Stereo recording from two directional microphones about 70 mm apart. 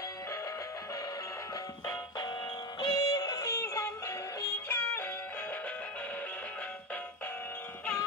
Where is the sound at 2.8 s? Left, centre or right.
Left.